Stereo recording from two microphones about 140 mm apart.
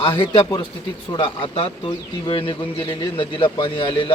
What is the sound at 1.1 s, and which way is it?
A man's voice, 40° left (ahead or behind).